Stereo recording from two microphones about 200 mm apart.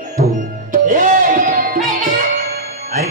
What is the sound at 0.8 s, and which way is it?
Music, 40° right (ahead or behind).